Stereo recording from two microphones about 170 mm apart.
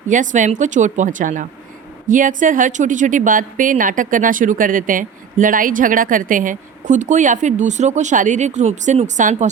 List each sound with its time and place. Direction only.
0.1 s a woman's voice: 50° right (ahead or behind)